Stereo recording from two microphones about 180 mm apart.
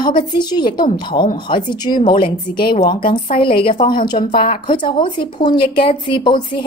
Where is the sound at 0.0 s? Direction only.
25° left (ahead or behind).